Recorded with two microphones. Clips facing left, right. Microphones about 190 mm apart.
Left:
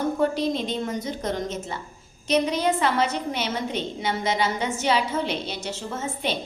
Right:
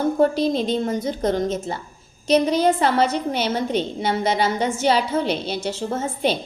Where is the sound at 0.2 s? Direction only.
35° right (ahead or behind).